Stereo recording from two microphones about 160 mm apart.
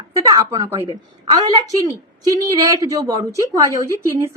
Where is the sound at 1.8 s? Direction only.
20° right (ahead or behind).